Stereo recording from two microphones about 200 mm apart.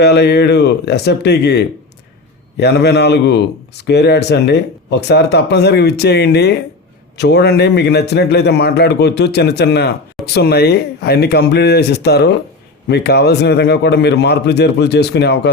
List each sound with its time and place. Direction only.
0.0 s speech: 55° left (ahead or behind)